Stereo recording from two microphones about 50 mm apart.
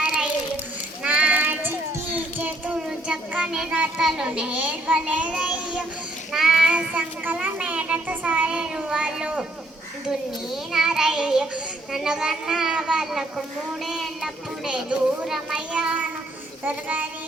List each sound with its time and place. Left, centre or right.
0.0 s child singing: centre
1.0 s child singing: right
2.1 s a sound: right
2.7 s child singing: centre
4.2 s child singing: right
6.3 s a child's voice: centre; by 8.1 s right
8.1 s child singing: right
8.4 s a child's voice: centre
10.1 s a child's voice: centre
13.8 s a sound: centre
15.3 s a child's voice: centre
15.7 s child singing: right